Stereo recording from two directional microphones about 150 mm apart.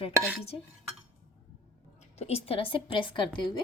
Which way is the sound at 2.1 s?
45° left (ahead or behind).